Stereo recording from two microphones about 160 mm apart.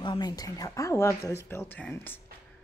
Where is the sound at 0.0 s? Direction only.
30° left (ahead or behind); by 2.1 s 10° left (ahead or behind).